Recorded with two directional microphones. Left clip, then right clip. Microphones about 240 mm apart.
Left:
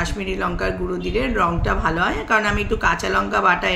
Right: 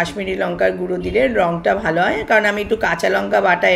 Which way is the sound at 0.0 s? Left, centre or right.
Left.